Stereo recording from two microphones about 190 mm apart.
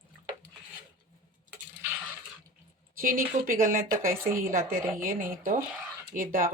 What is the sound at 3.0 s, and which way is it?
Speech, 45° right (ahead or behind).